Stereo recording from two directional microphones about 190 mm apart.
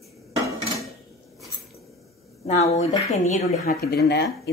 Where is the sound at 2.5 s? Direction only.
35° left (ahead or behind).